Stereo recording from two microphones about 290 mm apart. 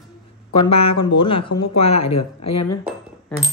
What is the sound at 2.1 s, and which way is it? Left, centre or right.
Speech, left.